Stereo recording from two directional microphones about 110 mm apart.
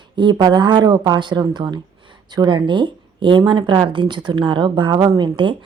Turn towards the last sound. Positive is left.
turn(degrees=-45)  # may be behind; listen again after turning